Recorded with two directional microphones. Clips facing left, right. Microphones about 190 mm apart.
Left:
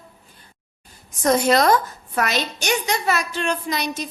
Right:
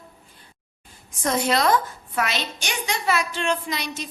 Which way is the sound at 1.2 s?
45° left (ahead or behind).